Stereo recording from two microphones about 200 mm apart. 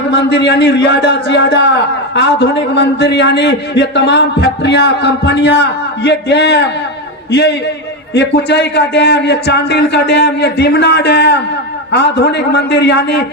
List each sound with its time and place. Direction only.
0.1 s a man's voice: 60° left (ahead or behind)